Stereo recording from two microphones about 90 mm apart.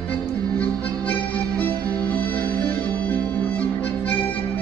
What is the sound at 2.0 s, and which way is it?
Music, 15° left (ahead or behind).